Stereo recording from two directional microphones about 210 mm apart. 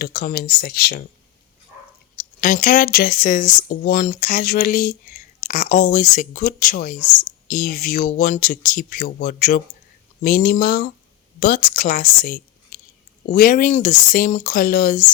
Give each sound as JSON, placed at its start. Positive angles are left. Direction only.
{"t": 0.0, "sound": "speech", "side_deg": 45}
{"t": 2.1, "sound": "a woman's voice", "side_deg": 40}